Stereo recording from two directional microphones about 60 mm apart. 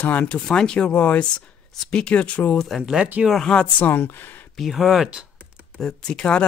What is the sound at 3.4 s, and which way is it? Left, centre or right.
Speech, centre.